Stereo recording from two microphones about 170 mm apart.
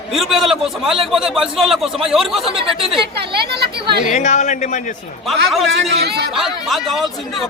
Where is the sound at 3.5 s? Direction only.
75° right (ahead or behind).